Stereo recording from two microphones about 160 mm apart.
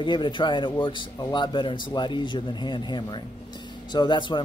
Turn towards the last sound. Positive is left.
turn(degrees=30)  # may be behind; listen again after turning